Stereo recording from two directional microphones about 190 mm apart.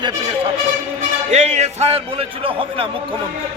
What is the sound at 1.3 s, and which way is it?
Speech, 35° right (ahead or behind).